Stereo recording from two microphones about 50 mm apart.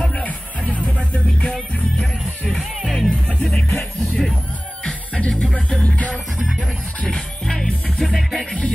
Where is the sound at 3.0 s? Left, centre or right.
Centre.